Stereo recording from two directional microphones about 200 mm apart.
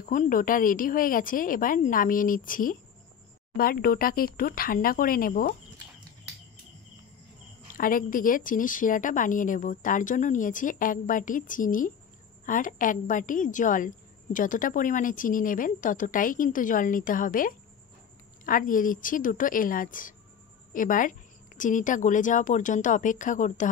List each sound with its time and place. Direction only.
0.0 s a woman's voice: 40° left (ahead or behind)
7.7 s a woman's voice: 45° left (ahead or behind)